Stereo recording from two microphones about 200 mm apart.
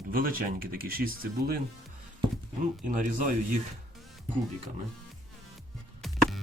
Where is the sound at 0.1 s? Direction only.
45° right (ahead or behind).